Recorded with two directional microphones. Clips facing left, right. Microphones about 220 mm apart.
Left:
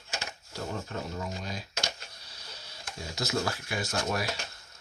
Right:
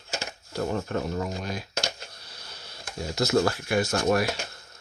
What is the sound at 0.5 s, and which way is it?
Speech, 55° right (ahead or behind).